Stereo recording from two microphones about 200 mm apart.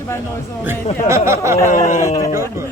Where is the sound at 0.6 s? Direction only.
15° right (ahead or behind).